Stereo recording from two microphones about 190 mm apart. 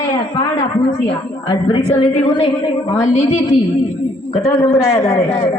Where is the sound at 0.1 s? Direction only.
20° left (ahead or behind).